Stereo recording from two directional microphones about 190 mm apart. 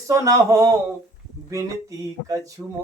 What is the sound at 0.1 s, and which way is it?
Speech, 15° right (ahead or behind).